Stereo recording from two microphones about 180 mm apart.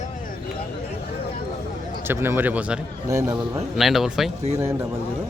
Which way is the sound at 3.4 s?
Centre (ahead or behind).